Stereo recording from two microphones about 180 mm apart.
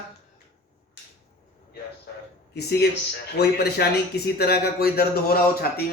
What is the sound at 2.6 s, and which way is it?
Speech, 65° left (ahead or behind).